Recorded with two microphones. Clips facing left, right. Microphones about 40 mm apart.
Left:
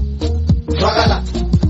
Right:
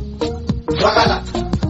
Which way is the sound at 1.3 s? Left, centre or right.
Right.